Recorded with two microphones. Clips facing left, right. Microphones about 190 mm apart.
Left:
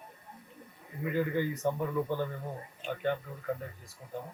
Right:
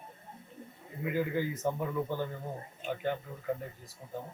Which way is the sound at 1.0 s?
10° right (ahead or behind).